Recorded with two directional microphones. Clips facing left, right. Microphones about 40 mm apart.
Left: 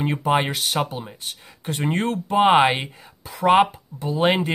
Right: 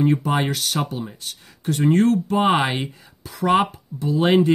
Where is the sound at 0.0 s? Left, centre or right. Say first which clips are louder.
Right 1 dB; left.